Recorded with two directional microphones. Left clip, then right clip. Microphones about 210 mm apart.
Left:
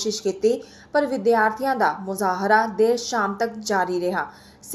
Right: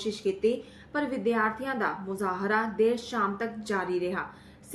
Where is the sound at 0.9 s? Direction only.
15° left (ahead or behind).